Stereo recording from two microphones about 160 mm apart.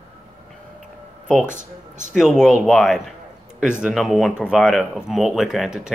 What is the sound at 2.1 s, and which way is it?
Speech, centre (ahead or behind).